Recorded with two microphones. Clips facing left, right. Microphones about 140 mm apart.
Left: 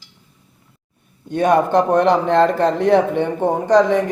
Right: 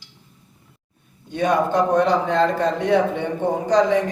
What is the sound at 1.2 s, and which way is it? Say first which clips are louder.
A man's voice: left 4 dB; 55° left (ahead or behind).